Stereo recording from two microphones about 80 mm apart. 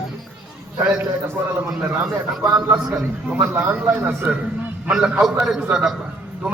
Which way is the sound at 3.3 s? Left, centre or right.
Right.